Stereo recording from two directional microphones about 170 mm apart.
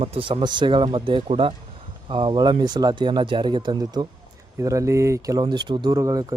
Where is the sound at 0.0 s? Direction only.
35° right (ahead or behind).